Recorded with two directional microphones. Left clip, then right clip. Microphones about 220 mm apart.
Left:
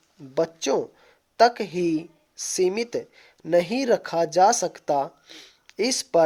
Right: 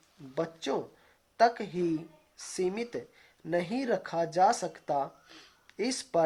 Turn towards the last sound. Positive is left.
turn(degrees=40)  # may be behind; listen again after turning